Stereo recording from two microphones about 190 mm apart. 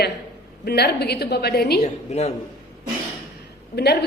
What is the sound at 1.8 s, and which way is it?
Speech, 35° left (ahead or behind).